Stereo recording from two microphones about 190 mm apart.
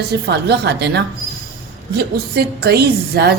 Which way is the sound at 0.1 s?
60° right (ahead or behind).